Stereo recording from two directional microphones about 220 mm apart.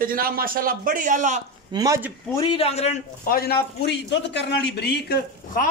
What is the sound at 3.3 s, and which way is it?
A man's voice, 45° left (ahead or behind).